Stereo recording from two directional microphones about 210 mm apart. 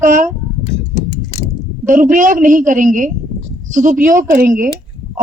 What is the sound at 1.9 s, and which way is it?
A woman's voice, 40° right (ahead or behind).